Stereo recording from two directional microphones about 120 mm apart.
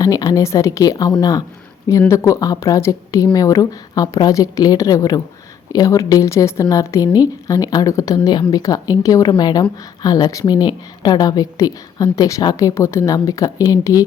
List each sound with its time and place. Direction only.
0.0 s a woman's voice: 35° left (ahead or behind)